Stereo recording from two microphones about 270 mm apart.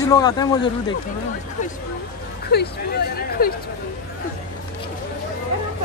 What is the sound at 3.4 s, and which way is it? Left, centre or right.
Speech, left.